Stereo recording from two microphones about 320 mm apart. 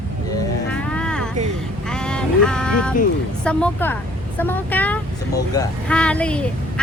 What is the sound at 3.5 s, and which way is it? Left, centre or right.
Speech, centre.